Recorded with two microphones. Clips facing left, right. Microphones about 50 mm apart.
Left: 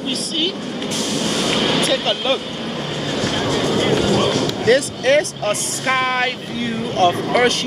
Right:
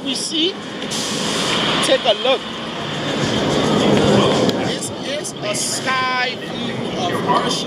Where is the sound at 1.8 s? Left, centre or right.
Centre.